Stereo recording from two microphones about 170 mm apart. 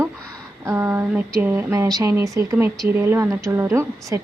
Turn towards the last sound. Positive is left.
turn(degrees=-15)  # may be behind; listen again after turning